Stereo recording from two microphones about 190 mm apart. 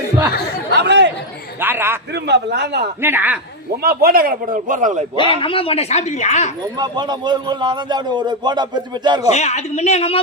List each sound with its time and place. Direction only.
0.7 s chatter: 65° right (ahead or behind)
1.6 s a man's voice: 10° right (ahead or behind)
2.1 s a man's voice: 60° right (ahead or behind)
3.0 s a man's voice: 10° right (ahead or behind)
3.8 s a man's voice: 50° right (ahead or behind)
5.4 s speech: 30° left (ahead or behind)
6.7 s a man's voice: 20° right (ahead or behind)
9.3 s speech: 35° left (ahead or behind)